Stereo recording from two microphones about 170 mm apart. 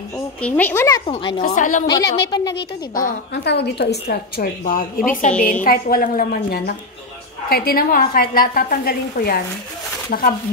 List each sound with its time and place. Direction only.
0.4 s a woman's voice: 10° left (ahead or behind)
1.0 s a woman's voice: 35° left (ahead or behind)
1.4 s a woman's voice: 50° left (ahead or behind)
1.9 s a woman's voice: 25° left (ahead or behind)
2.9 s a woman's voice: 55° left (ahead or behind)
3.4 s a woman's voice: 75° left (ahead or behind)